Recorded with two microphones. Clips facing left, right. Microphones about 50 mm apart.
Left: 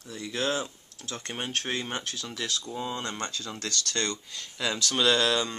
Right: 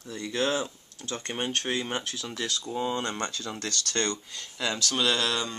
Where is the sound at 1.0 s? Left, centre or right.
Centre.